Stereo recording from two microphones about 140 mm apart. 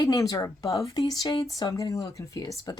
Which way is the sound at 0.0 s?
25° left (ahead or behind).